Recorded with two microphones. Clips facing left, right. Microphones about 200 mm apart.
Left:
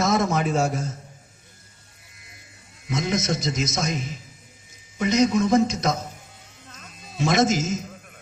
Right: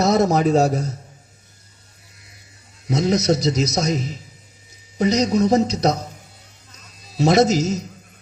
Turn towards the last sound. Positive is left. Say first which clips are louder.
# right 5 dB
turn(degrees=-40)  # may be behind; listen again after turning